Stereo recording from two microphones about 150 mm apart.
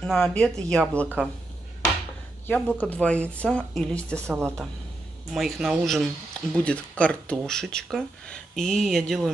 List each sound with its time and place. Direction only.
0.0 s speech: 5° left (ahead or behind)
1.0 s speech: 10° right (ahead or behind)
2.4 s speech: 10° left (ahead or behind)
4.3 s speech: 15° right (ahead or behind)
5.3 s speech: centre (ahead or behind)